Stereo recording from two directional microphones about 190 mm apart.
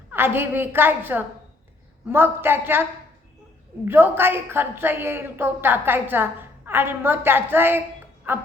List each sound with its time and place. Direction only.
0.1 s a woman's voice: 10° right (ahead or behind)
3.8 s a woman's voice: 10° right (ahead or behind)